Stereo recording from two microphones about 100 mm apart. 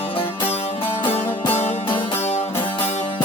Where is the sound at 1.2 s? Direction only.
20° left (ahead or behind).